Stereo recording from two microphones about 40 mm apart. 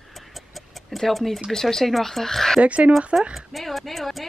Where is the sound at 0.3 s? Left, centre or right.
Centre.